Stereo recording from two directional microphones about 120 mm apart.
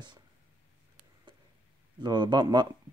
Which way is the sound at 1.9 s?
40° right (ahead or behind).